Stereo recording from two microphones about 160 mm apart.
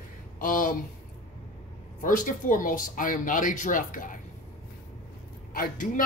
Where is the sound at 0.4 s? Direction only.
60° left (ahead or behind).